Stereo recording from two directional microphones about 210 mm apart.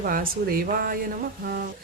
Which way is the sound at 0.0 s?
45° right (ahead or behind).